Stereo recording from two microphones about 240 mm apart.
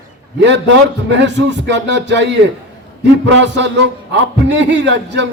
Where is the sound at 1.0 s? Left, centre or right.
Right.